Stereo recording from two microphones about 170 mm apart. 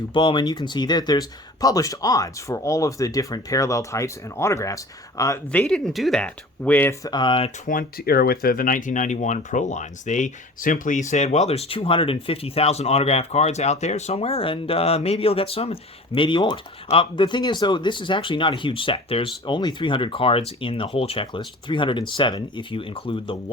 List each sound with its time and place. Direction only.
0.1 s speech: 30° left (ahead or behind)
5.5 s speech: 5° left (ahead or behind)
7.1 s speech: 30° left (ahead or behind)
7.7 s speech: 60° left (ahead or behind); by 23.4 s 30° left (ahead or behind)